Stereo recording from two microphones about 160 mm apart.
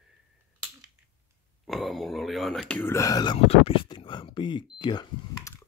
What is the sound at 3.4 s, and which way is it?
Speech, 35° left (ahead or behind).